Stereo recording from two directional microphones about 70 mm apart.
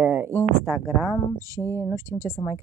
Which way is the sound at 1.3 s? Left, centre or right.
Right.